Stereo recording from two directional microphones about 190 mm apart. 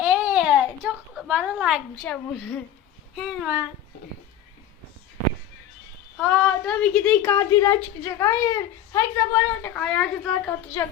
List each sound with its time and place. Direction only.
0.0 s a sound: 10° right (ahead or behind)
1.1 s a woman's voice: 5° right (ahead or behind)
6.1 s a woman's voice: 5° left (ahead or behind)
10.8 s a woman's voice: 15° left (ahead or behind)